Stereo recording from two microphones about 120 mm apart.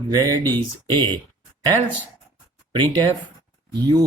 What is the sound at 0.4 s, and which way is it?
Speech, 20° left (ahead or behind).